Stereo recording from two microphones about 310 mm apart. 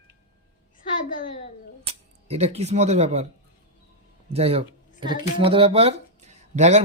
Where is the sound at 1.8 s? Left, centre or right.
Centre.